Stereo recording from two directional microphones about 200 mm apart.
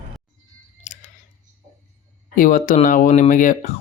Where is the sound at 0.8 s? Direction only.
35° left (ahead or behind).